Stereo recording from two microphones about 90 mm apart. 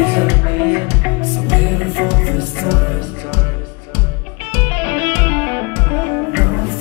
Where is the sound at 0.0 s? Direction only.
20° right (ahead or behind).